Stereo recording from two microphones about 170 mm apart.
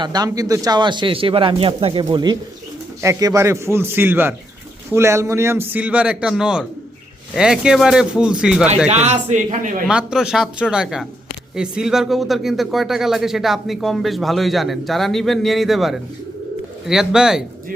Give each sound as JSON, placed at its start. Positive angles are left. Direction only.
{"t": 0.0, "sound": "a man's voice", "side_deg": -25}
{"t": 8.9, "sound": "a man's voice", "side_deg": -40}
{"t": 9.8, "sound": "speech", "side_deg": -5}